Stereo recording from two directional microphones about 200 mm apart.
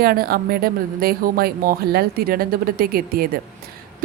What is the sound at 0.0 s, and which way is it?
A woman's voice, 50° right (ahead or behind).